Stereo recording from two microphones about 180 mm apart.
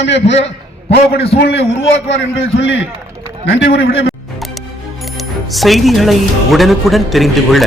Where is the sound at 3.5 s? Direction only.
70° left (ahead or behind).